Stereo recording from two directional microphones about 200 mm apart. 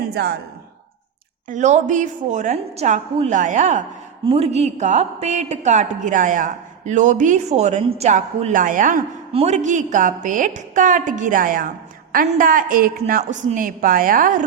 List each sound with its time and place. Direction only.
0.1 s a woman's voice: 55° right (ahead or behind)
1.5 s a woman's voice: 35° right (ahead or behind)
9.3 s a woman's voice: 30° right (ahead or behind)